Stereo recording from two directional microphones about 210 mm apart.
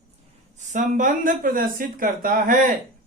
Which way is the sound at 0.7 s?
40° right (ahead or behind).